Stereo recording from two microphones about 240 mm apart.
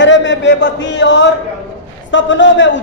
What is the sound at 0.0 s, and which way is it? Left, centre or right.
A man's voice, left.